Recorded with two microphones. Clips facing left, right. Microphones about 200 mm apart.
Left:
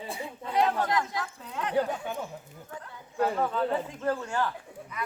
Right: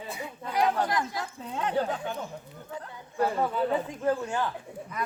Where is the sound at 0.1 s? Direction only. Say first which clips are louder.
Left 2 dB; 25° left (ahead or behind).